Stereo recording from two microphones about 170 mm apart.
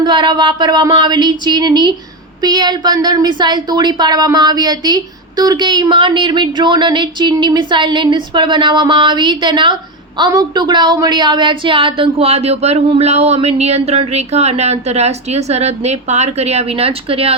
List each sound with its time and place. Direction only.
0.0 s a woman's voice: 30° right (ahead or behind)